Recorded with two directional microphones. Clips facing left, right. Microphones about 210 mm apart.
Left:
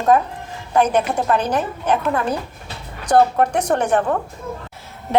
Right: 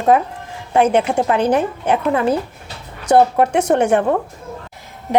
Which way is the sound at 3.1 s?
25° right (ahead or behind).